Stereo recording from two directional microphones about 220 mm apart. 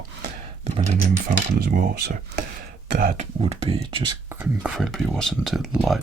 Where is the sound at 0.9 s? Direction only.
35° right (ahead or behind).